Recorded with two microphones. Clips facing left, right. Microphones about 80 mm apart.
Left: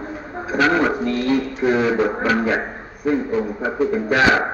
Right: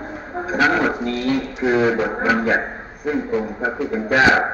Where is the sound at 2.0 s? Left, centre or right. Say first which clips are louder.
Even; centre.